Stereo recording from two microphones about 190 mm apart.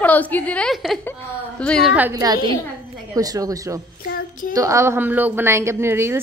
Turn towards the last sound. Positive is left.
turn(degrees=-15)  # may be behind; listen again after turning